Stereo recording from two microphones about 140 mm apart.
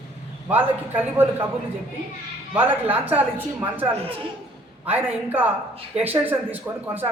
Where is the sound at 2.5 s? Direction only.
15° right (ahead or behind).